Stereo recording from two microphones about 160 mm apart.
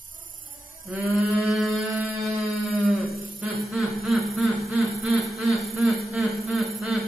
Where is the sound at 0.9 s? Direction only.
10° right (ahead or behind).